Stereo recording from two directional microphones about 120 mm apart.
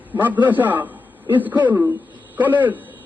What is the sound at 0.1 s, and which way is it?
A man's voice, 15° right (ahead or behind).